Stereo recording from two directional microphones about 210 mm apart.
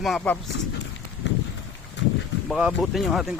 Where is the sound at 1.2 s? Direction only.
60° left (ahead or behind).